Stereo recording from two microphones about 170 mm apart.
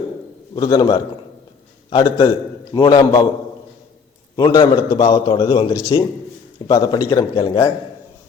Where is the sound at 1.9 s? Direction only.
30° left (ahead or behind).